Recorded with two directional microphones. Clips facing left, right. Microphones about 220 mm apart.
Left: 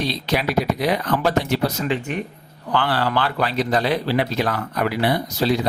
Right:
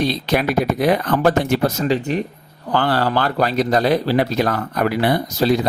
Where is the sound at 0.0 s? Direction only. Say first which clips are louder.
Right 4 dB; 50° right (ahead or behind).